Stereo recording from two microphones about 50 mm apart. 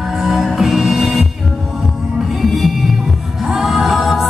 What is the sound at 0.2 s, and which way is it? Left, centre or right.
Music, centre.